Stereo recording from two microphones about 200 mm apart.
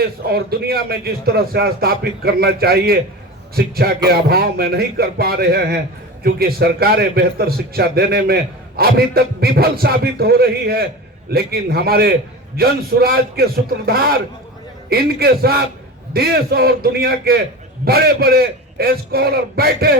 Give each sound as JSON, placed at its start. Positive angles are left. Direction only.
{"t": 0.3, "sound": "a man's voice", "side_deg": -50}